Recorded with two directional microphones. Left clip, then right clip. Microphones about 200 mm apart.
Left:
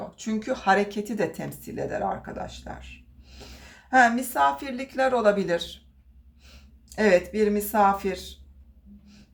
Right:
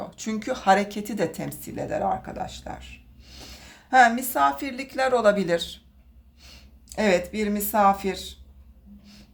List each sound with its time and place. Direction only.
0.2 s speech: 30° right (ahead or behind)
6.9 s speech: 25° right (ahead or behind)